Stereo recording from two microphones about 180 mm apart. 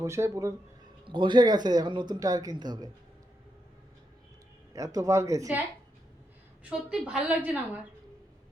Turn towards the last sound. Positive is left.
turn(degrees=-5)  # may be behind; listen again after turning